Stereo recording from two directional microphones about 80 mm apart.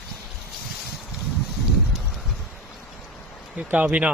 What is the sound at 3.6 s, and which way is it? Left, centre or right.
Speech, centre.